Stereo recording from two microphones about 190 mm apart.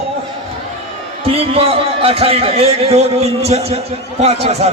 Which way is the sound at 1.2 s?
30° right (ahead or behind).